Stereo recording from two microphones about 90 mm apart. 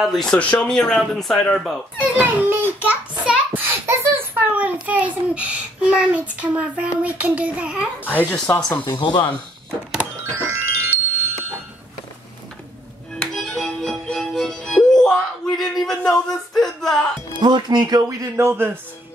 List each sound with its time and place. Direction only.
0.0 s speech: centre (ahead or behind)
2.1 s a sound: 20° right (ahead or behind)
8.0 s speech: 20° left (ahead or behind)
8.8 s speech: 55° left (ahead or behind)
10.3 s music: 30° right (ahead or behind)
13.1 s music: 5° left (ahead or behind)
17.4 s speech: 55° right (ahead or behind)
18.3 s a man's voice: 25° right (ahead or behind)